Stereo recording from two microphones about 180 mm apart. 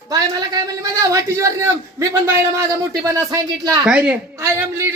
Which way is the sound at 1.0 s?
15° right (ahead or behind).